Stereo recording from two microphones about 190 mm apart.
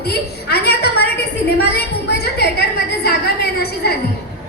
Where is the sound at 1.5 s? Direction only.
60° left (ahead or behind).